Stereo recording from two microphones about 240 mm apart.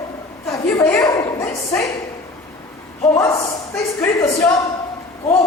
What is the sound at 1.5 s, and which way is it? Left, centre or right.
Speech, centre.